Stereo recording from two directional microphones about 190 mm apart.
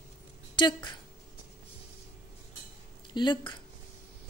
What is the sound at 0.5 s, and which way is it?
Speech, 25° left (ahead or behind).